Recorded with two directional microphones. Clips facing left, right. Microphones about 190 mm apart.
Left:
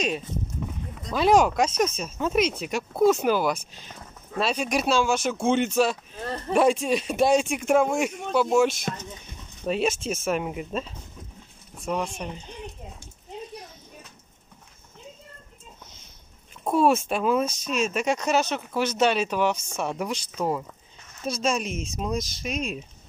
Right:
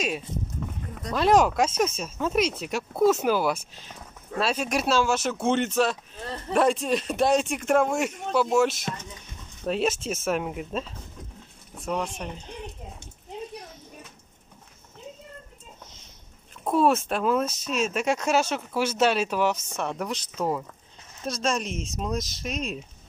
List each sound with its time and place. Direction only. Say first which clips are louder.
1.1 s speech: left 1 dB; centre (ahead or behind)
16.6 s speech: left 1 dB; centre (ahead or behind)